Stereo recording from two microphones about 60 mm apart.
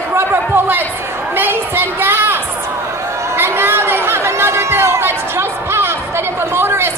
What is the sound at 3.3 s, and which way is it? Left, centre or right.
Chatter, right.